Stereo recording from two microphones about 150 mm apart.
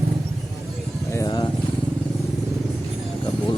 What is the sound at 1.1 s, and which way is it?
Motorcycle, 25° left (ahead or behind).